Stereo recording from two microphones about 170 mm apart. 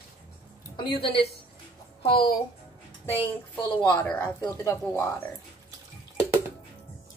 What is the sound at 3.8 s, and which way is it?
Speech, 15° left (ahead or behind).